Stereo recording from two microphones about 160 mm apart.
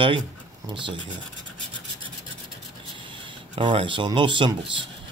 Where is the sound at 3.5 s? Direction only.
30° right (ahead or behind).